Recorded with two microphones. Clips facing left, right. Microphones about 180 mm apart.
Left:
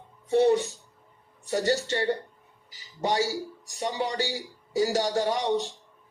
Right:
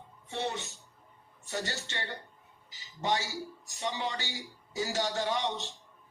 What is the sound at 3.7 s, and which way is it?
A man's voice, 40° left (ahead or behind).